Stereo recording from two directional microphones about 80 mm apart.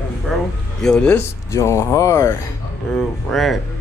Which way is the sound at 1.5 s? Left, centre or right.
Left.